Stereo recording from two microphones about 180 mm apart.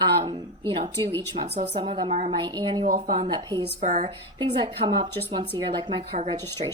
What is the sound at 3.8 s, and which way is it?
Speech, 40° right (ahead or behind).